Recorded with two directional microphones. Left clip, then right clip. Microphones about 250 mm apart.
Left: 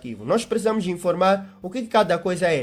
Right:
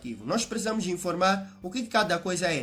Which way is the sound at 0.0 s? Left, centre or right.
Left.